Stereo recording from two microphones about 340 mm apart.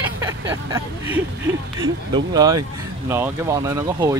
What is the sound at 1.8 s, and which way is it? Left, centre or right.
Speech, centre.